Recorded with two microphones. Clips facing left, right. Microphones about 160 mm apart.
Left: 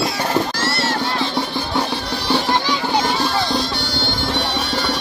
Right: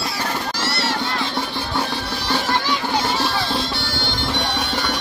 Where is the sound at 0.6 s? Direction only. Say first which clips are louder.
Left 2 dB; 50° left (ahead or behind).